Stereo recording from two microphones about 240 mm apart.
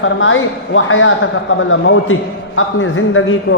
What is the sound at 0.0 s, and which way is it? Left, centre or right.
A man's voice, left.